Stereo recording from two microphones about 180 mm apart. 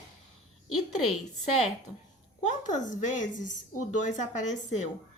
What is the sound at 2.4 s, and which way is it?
A woman's voice, 45° left (ahead or behind).